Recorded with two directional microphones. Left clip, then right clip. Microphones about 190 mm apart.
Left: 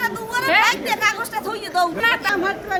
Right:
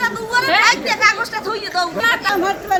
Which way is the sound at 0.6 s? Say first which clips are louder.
Right 4 dB; 60° left (ahead or behind).